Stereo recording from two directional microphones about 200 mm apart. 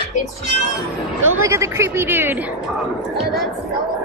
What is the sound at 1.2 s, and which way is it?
Speech, 90° right.